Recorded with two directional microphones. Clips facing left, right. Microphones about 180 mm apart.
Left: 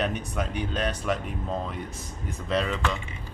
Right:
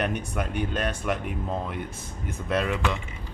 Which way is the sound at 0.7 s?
5° right (ahead or behind).